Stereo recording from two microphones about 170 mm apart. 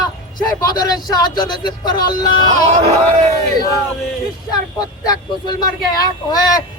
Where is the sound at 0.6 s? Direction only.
25° left (ahead or behind).